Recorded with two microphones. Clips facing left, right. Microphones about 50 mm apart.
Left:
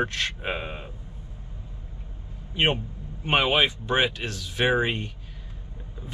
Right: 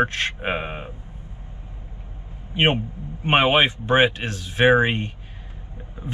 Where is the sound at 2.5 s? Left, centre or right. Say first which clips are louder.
Right 4 dB; right.